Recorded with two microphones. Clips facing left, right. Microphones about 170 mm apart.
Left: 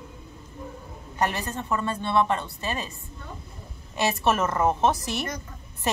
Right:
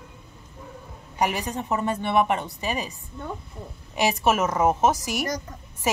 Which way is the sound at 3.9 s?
10° right (ahead or behind).